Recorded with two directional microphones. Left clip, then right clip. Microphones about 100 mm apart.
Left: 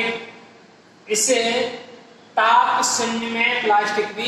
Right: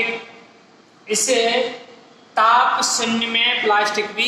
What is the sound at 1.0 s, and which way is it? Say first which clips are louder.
A woman's voice: right 1 dB; 40° right (ahead or behind).